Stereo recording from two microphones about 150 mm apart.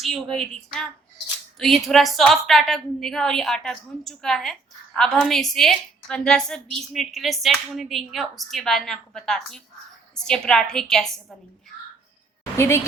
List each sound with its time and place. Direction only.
0.0 s a woman's voice: centre (ahead or behind)
12.5 s a woman's voice: 15° left (ahead or behind)